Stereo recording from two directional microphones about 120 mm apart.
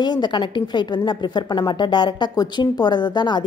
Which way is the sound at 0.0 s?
40° left (ahead or behind).